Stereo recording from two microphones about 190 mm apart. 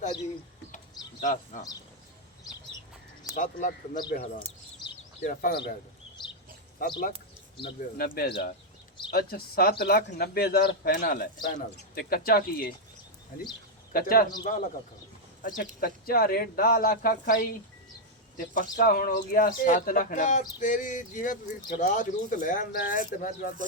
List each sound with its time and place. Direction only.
1.2 s speech: 45° left (ahead or behind)
3.3 s speech: 45° left (ahead or behind)
6.8 s speech: 50° left (ahead or behind)
13.9 s speech: 50° left (ahead or behind)
14.4 s speech: 40° left (ahead or behind)